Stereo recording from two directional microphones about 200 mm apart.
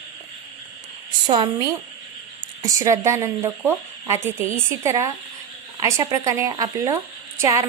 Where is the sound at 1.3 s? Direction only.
20° right (ahead or behind).